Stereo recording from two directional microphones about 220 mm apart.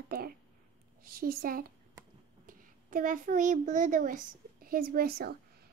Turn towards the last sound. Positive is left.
turn(degrees=-45)  # may be behind; listen again after turning